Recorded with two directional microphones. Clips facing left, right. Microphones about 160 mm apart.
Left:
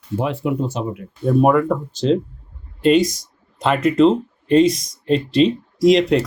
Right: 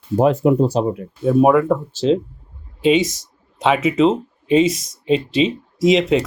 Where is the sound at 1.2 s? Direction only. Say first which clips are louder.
Right 2 dB; centre (ahead or behind).